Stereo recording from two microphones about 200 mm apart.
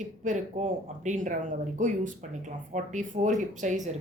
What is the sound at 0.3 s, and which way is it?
A woman's voice, 35° right (ahead or behind).